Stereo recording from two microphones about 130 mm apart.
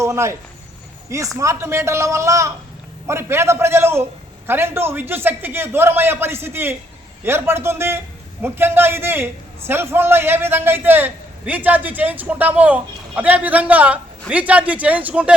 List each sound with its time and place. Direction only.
0.0 s speech: 25° right (ahead or behind)
1.4 s a man's voice: 20° right (ahead or behind)